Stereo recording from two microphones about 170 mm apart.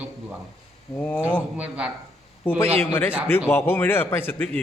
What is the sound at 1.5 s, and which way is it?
Speech, 5° right (ahead or behind).